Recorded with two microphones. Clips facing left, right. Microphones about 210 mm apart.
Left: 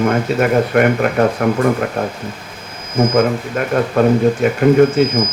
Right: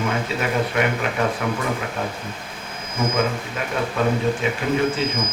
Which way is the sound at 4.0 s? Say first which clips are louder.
Left 9 dB; 45° left (ahead or behind).